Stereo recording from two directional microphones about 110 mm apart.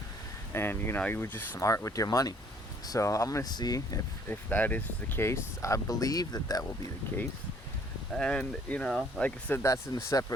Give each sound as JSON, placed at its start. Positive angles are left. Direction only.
{"t": 0.5, "sound": "speech", "side_deg": 20}
{"t": 4.3, "sound": "speech", "side_deg": 15}
{"t": 8.1, "sound": "speech", "side_deg": 5}
{"t": 9.6, "sound": "speech", "side_deg": 25}